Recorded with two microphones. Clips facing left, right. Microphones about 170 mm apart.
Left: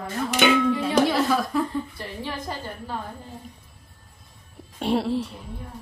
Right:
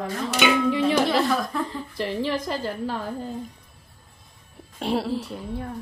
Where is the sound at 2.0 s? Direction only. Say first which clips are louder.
Right 7 dB; 90° right.